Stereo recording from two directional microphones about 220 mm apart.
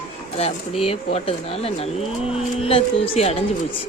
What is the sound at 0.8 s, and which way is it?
Speech, 25° left (ahead or behind).